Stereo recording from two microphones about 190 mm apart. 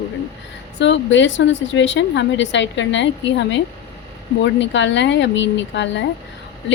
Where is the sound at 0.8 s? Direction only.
70° left (ahead or behind).